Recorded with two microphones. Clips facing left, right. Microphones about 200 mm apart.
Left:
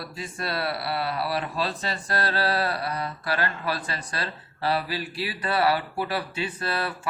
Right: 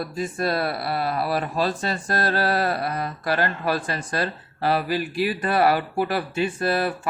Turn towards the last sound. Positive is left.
turn(degrees=-45)  # may be behind; listen again after turning